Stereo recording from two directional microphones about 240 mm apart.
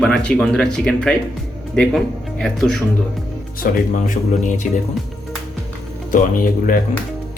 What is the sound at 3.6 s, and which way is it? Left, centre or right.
Speech, left.